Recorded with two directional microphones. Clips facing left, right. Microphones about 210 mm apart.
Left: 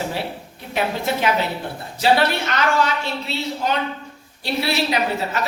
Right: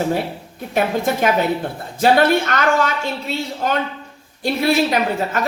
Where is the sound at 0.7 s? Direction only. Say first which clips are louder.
Right 4 dB; 45° right (ahead or behind).